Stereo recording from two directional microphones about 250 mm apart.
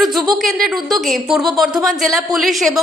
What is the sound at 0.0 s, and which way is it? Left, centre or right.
A woman's voice, centre.